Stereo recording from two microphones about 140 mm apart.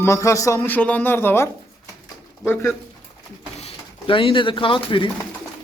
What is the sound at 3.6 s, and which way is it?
Speech, 40° left (ahead or behind).